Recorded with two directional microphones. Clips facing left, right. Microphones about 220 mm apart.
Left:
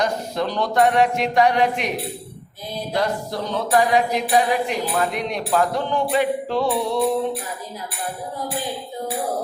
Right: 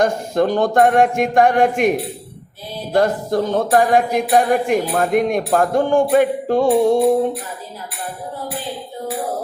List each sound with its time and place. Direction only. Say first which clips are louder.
0.0 s speech: right 6 dB; 50° right (ahead or behind)